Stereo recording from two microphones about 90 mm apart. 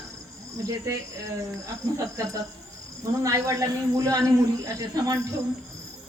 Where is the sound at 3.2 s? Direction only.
35° right (ahead or behind).